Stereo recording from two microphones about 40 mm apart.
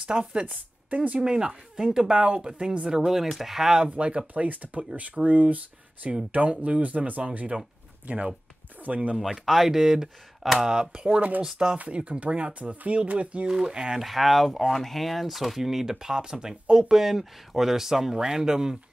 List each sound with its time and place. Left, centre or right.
0.0 s speech: right
3.1 s speech: centre
3.9 s speech: right
4.3 s speech: right
9.2 s speech: centre; by 11.1 s right
11.1 s speech: right
13.5 s speech: centre
14.0 s speech: centre